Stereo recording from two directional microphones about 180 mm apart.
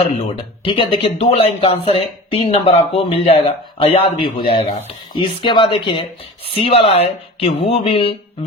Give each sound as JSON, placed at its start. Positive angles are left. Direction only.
{"t": 0.0, "sound": "speech", "side_deg": 30}